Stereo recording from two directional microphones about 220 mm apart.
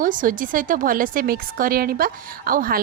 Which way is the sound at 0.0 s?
40° right (ahead or behind).